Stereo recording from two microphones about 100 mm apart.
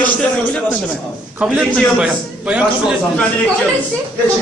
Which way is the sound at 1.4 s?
15° right (ahead or behind).